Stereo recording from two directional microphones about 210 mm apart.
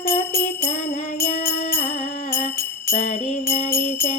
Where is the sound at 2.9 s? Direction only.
35° left (ahead or behind).